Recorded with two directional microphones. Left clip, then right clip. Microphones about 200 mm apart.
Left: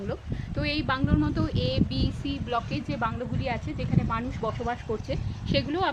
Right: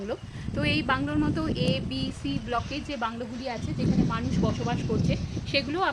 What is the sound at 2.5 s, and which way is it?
Speech, centre (ahead or behind).